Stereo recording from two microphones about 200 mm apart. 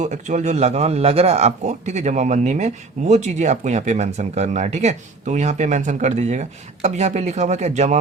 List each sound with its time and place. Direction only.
0.0 s a man's voice: 35° right (ahead or behind)